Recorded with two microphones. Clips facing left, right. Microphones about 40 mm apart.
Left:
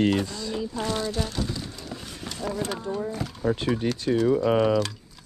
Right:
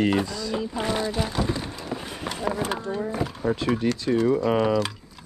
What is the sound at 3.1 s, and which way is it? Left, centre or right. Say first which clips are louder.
Speech: right 2 dB; centre.